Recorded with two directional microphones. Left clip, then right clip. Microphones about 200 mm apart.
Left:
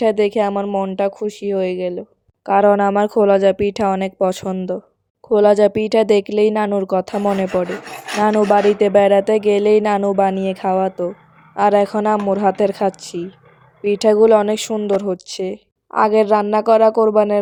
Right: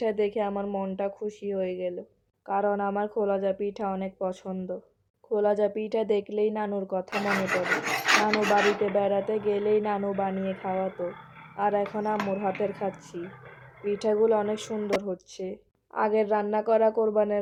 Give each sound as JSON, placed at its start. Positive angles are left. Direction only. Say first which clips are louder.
{"t": 0.0, "sound": "speech", "louder": "left 11 dB", "side_deg": 50}
{"t": 8.5, "sound": "speech", "louder": "left 11 dB", "side_deg": 55}